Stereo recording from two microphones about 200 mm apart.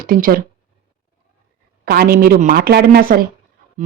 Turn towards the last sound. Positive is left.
turn(degrees=-50)  # may be behind; listen again after turning